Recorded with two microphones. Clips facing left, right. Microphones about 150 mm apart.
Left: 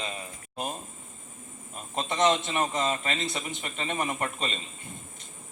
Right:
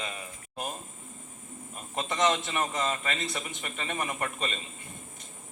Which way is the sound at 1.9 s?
25° left (ahead or behind).